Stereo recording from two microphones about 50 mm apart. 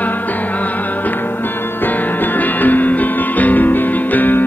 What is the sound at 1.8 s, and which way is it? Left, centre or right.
Music, left.